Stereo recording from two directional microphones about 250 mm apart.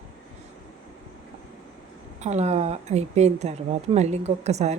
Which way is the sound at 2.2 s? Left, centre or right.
Right.